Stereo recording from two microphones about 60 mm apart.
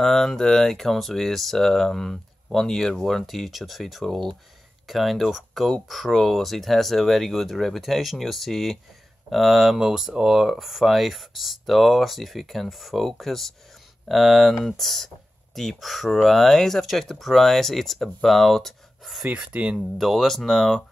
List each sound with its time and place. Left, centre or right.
0.0 s speech: centre
19.2 s speech: centre
20.0 s speech: centre